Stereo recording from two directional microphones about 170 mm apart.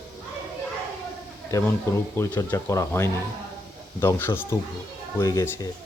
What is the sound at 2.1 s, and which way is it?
Speech, 15° left (ahead or behind).